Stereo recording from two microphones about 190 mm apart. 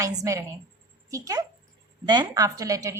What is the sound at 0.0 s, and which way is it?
A woman's voice, 15° right (ahead or behind).